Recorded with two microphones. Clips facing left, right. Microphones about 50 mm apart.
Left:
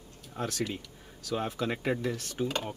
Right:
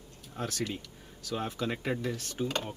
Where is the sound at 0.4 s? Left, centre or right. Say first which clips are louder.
Left 2 dB; centre.